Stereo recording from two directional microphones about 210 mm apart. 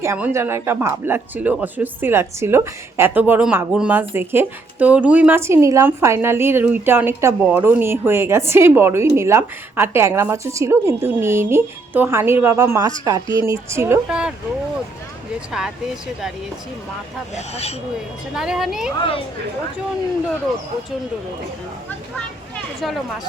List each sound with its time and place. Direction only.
0.0 s speech: 10° right (ahead or behind)
17.3 s speech: 30° left (ahead or behind)
18.3 s speech: 5° right (ahead or behind)
18.9 s speech: 25° left (ahead or behind)
22.8 s speech: centre (ahead or behind)